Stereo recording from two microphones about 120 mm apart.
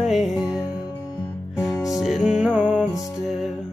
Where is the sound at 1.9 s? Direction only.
Centre (ahead or behind).